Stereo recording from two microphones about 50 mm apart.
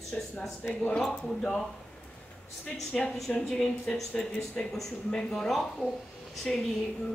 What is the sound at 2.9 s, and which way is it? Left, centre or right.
A woman's voice, centre.